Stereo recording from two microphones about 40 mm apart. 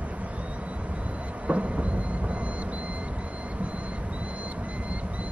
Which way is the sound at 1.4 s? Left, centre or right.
Right.